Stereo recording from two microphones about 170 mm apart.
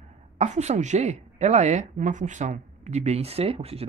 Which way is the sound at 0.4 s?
40° right (ahead or behind).